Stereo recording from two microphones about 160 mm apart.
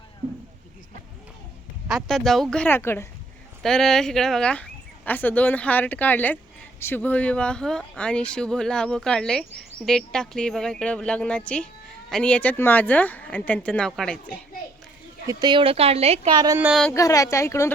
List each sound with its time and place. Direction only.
1.9 s speech: centre (ahead or behind)
3.6 s speech: 5° left (ahead or behind)
15.3 s speech: 25° right (ahead or behind)
16.3 s speech: 25° right (ahead or behind)
16.6 s speech: 10° right (ahead or behind)
16.9 s speech: 20° left (ahead or behind)